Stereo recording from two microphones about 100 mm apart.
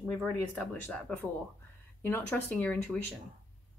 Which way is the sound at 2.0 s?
20° left (ahead or behind).